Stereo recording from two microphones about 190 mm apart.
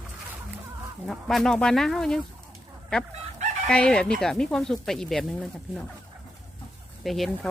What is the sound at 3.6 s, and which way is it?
Speech, 5° left (ahead or behind).